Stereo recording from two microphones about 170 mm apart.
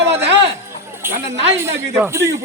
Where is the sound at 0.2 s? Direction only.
90° right.